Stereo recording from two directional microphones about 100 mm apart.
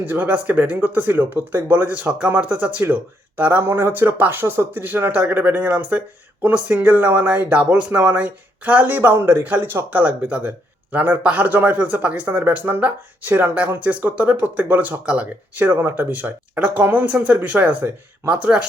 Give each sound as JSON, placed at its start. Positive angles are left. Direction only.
{"t": 0.0, "sound": "speech", "side_deg": -20}